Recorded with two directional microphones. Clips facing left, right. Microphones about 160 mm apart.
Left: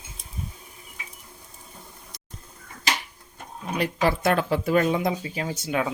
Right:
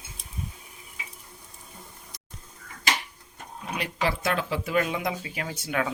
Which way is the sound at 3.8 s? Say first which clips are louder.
Left 5 dB; 45° left (ahead or behind).